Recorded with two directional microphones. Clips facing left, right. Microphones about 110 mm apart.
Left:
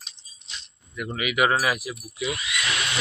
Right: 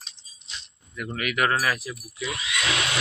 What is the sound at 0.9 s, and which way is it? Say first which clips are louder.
Speech: left 1 dB; 5° left (ahead or behind).